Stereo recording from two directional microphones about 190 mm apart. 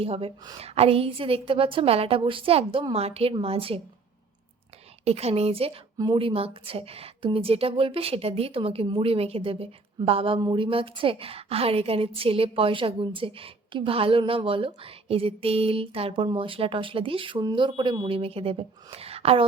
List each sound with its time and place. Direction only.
0.0 s a woman's voice: 30° right (ahead or behind)
5.0 s a woman's voice: 35° right (ahead or behind)